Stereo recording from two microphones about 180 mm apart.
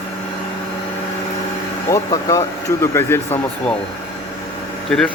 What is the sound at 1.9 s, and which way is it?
Speech, 20° left (ahead or behind).